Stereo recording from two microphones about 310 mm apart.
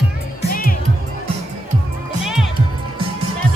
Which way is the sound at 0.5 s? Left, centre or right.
Left.